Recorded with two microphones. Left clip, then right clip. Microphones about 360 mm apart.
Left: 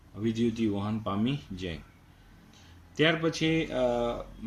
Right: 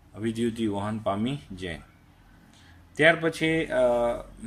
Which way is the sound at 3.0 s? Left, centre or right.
Centre.